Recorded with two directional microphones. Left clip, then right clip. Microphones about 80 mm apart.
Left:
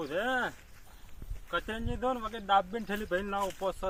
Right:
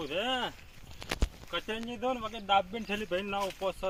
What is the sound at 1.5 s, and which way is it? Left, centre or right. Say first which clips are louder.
Speech: left 2 dB; left.